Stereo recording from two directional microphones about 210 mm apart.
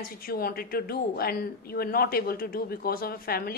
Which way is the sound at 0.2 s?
45° left (ahead or behind).